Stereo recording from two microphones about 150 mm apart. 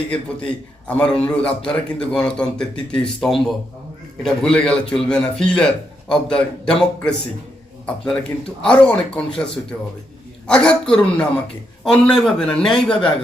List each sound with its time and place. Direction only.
0.1 s a man's voice: 5° left (ahead or behind)
8.1 s a man's voice: 5° left (ahead or behind)
10.4 s a man's voice: 5° left (ahead or behind)